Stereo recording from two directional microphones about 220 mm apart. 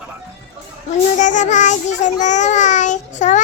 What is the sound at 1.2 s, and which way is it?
Child singing, 35° left (ahead or behind).